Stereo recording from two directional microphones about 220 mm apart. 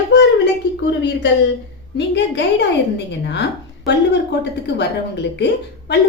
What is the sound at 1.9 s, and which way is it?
A woman's voice, 50° left (ahead or behind).